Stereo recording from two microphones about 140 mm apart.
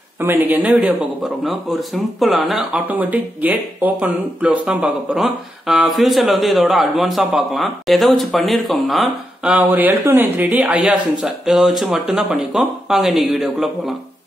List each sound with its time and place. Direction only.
0.2 s speech: 15° right (ahead or behind)
2.7 s speech: 10° right (ahead or behind)